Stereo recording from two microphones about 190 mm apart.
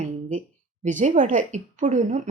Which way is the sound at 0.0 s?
40° right (ahead or behind).